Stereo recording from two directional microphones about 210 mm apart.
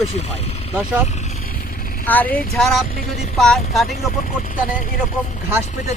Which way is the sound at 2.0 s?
5° left (ahead or behind).